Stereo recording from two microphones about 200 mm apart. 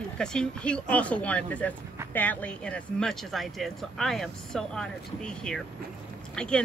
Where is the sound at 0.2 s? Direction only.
5° left (ahead or behind).